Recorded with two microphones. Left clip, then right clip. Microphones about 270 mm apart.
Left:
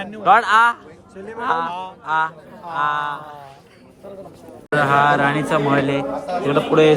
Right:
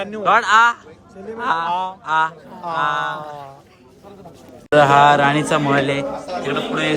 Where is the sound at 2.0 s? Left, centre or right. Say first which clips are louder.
Even; centre.